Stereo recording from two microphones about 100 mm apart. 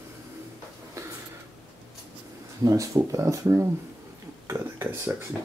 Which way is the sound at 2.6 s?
35° right (ahead or behind).